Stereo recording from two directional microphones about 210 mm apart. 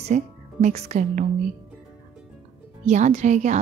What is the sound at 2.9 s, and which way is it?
Speech, 35° right (ahead or behind).